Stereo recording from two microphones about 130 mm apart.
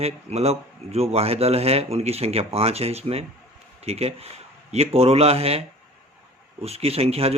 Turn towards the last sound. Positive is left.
turn(degrees=-50)  # may be behind; listen again after turning